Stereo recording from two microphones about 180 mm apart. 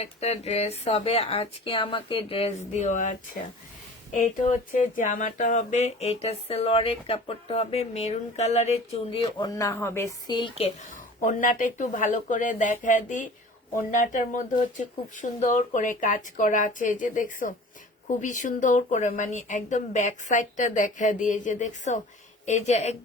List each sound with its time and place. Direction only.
0.0 s speech: 35° left (ahead or behind)
9.4 s speech: 20° left (ahead or behind)
10.9 s speech: 45° left (ahead or behind)